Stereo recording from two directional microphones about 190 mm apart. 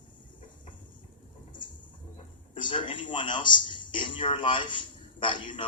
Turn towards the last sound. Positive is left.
turn(degrees=25)  # may be behind; listen again after turning